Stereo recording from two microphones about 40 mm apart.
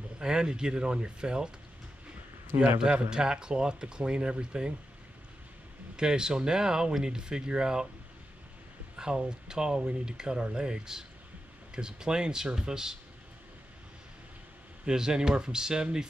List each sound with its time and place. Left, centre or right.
0.2 s speech: right
2.8 s speech: right
5.9 s speech: centre
8.9 s speech: right
14.9 s speech: centre